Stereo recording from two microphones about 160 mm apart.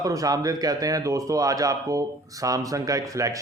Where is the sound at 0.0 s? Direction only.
20° right (ahead or behind).